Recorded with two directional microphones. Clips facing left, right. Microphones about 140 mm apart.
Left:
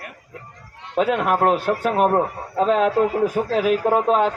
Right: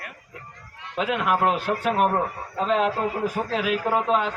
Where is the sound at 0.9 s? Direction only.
45° left (ahead or behind).